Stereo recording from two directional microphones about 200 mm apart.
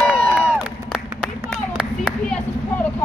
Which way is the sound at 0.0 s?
10° left (ahead or behind).